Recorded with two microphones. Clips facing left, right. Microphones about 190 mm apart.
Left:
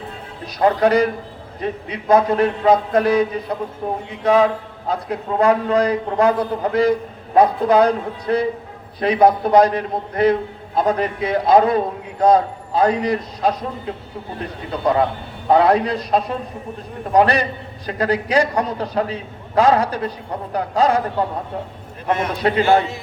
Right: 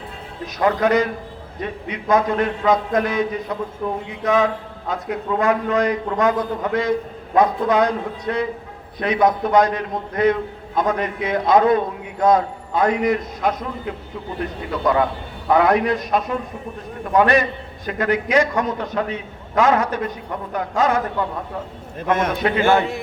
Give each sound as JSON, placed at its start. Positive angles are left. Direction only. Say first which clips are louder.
{"t": 0.4, "sound": "a man's voice", "louder": "left 2 dB", "side_deg": 35}
{"t": 22.1, "sound": "a man's voice", "louder": "right 1 dB", "side_deg": -50}